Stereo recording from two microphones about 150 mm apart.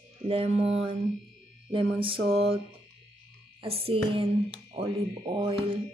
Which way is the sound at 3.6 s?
40° right (ahead or behind).